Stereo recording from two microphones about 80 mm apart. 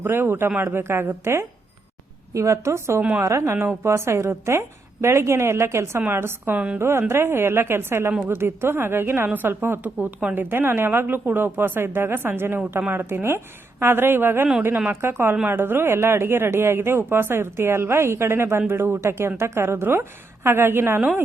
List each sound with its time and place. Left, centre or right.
0.0 s speech: right
3.0 s speech: right
3.2 s speech: right